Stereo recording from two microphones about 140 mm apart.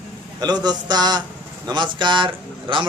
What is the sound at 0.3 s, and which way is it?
A man's voice, 30° right (ahead or behind).